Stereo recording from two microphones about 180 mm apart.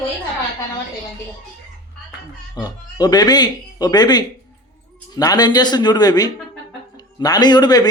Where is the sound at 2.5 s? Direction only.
20° left (ahead or behind).